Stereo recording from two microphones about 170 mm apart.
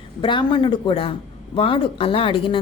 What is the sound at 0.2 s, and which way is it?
Speech, 30° left (ahead or behind).